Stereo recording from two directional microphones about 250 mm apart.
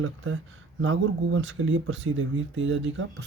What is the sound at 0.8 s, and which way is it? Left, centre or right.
A man's voice, right.